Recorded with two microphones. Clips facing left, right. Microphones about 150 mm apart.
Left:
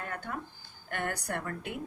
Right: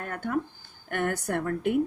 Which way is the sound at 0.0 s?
55° right (ahead or behind).